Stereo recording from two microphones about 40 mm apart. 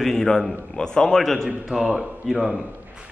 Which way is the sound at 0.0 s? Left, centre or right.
Centre.